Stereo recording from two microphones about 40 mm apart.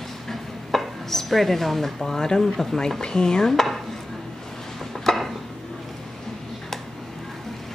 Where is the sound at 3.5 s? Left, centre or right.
Centre.